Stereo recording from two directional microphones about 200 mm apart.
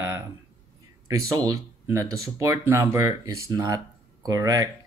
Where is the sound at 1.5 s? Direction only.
15° right (ahead or behind).